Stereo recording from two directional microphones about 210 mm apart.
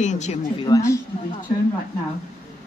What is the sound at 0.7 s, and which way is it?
Speech, 15° left (ahead or behind).